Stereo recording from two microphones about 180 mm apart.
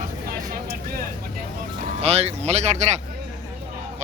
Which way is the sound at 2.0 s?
35° right (ahead or behind).